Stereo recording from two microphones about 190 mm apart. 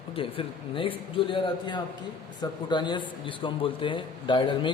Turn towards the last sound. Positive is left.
turn(degrees=25)  # may be behind; listen again after turning